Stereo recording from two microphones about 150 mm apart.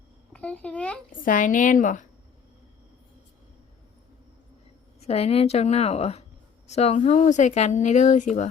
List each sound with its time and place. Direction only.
0.3 s a child's voice: 10° left (ahead or behind)
1.1 s a woman's voice: 65° left (ahead or behind)
4.9 s speech: 45° left (ahead or behind)